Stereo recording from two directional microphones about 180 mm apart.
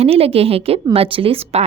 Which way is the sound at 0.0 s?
35° right (ahead or behind).